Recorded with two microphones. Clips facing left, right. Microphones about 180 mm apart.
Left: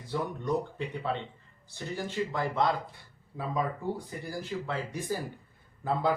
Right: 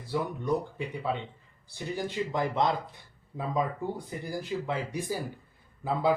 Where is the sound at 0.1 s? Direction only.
10° right (ahead or behind).